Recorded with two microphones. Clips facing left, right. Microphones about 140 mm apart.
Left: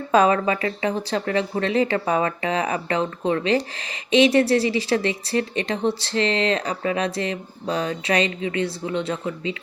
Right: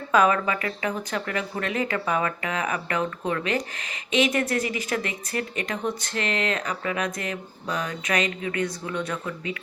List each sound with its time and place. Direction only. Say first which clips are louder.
0.1 s speech: left 3 dB; 30° left (ahead or behind)